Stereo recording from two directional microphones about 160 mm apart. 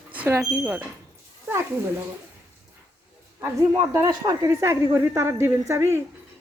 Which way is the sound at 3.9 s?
20° right (ahead or behind).